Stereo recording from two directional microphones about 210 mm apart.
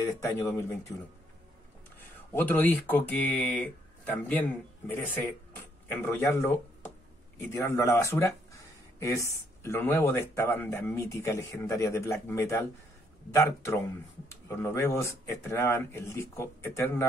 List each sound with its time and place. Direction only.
0.0 s speech: 10° left (ahead or behind)
2.0 s speech: 10° left (ahead or behind)